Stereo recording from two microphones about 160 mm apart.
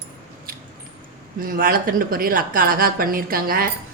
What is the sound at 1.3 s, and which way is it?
A woman's voice, 65° right (ahead or behind).